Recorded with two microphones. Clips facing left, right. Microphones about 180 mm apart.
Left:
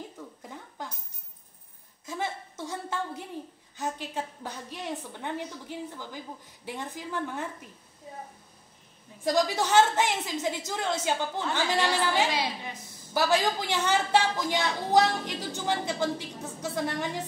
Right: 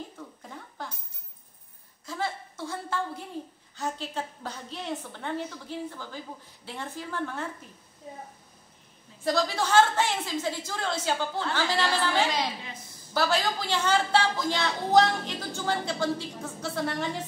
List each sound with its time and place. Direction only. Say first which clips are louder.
2.0 s a sound: right 1 dB; 20° left (ahead or behind)
3.7 s a woman's voice: even; 15° left (ahead or behind)
9.2 s a woman's voice: left 1 dB; 15° left (ahead or behind)